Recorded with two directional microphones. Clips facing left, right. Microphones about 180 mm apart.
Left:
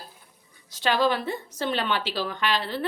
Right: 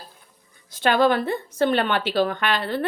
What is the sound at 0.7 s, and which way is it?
A woman's voice, 55° right (ahead or behind).